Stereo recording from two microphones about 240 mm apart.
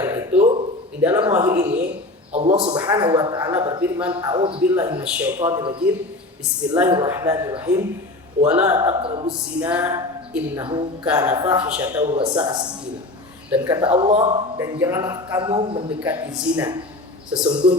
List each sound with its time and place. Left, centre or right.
0.0 s a sound: centre
1.3 s speech: centre
2.3 s speech: right
2.7 s speech: centre
4.6 s speech: centre
6.9 s speech: centre
9.6 s speech: centre
12.1 s speech: centre
13.8 s speech: right
14.3 s speech: centre
16.0 s speech: centre
17.3 s speech: right